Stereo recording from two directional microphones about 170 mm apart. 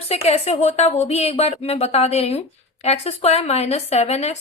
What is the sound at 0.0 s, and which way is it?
Speech, 40° left (ahead or behind).